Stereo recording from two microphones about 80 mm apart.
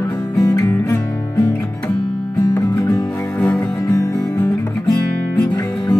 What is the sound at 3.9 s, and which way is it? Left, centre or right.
Music, left.